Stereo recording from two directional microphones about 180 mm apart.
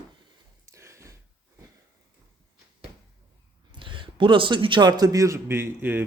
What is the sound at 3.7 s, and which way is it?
A man's voice, 25° right (ahead or behind).